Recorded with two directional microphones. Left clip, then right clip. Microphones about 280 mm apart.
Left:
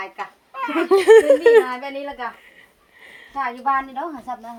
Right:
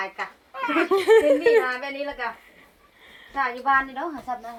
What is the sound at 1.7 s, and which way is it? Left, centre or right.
Speech, left.